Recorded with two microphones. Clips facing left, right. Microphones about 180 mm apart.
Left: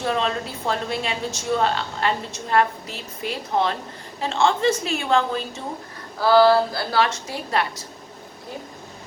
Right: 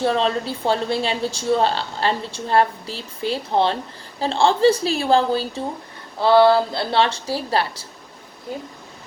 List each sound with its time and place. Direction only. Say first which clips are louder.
0.0 s a woman's voice: right 4 dB; 30° right (ahead or behind)